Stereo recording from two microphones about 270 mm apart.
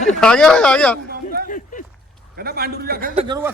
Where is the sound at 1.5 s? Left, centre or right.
Left.